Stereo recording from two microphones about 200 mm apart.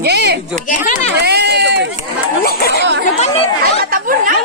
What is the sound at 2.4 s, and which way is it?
Speech, 50° left (ahead or behind).